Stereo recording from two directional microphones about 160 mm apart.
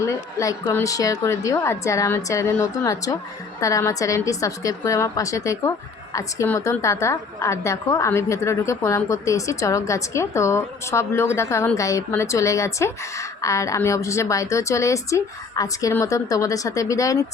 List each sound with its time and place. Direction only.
0.0 s a woman's voice: 20° left (ahead or behind)